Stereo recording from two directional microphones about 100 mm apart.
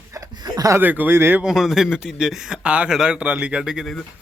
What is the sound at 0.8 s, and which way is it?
Speech, 20° right (ahead or behind).